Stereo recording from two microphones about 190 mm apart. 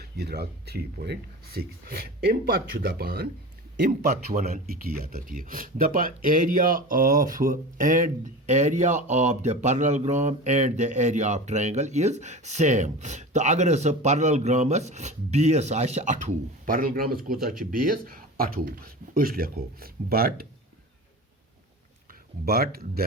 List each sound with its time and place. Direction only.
0.0 s speech: 60° right (ahead or behind)
22.4 s speech: 55° right (ahead or behind)